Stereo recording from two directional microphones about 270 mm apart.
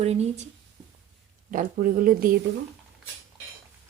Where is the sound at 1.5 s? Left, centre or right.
Right.